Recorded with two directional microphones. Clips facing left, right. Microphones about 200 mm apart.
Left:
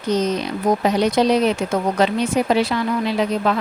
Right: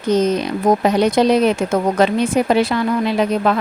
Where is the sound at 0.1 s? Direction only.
50° right (ahead or behind).